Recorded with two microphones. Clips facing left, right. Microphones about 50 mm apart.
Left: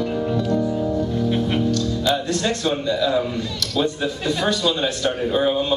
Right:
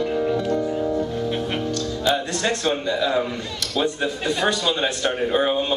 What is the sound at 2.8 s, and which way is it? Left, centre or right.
Speech, right.